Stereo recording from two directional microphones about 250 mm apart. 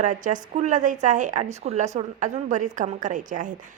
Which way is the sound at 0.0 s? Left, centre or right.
Right.